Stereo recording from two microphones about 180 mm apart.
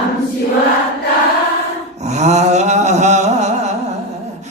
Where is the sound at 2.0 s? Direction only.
40° right (ahead or behind).